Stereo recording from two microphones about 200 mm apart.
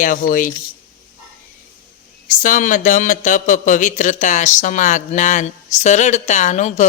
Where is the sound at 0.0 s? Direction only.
40° left (ahead or behind).